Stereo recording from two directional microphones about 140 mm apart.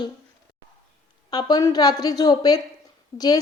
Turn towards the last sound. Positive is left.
turn(degrees=25)  # may be behind; listen again after turning